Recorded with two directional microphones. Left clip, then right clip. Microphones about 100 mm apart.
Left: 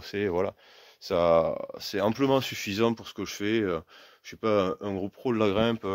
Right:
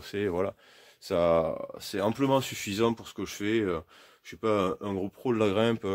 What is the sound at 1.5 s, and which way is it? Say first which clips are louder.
Speech: left 2 dB; 75° left (ahead or behind).